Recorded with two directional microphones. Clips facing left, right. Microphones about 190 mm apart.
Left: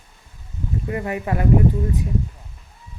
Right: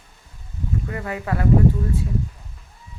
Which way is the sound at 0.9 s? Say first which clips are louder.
Left 5 dB; 20° left (ahead or behind).